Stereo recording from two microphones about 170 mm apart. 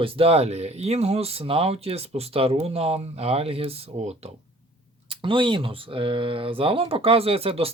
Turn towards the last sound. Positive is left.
turn(degrees=-35)  # may be behind; listen again after turning